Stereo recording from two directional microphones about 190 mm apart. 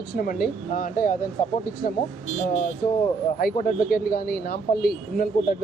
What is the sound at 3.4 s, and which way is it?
Speech, 50° left (ahead or behind).